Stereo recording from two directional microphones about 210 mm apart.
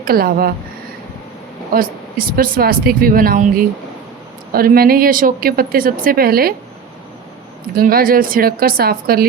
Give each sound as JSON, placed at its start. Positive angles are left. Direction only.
{"t": 0.0, "sound": "speech", "side_deg": -45}
{"t": 1.7, "sound": "speech", "side_deg": -40}
{"t": 7.8, "sound": "speech", "side_deg": -45}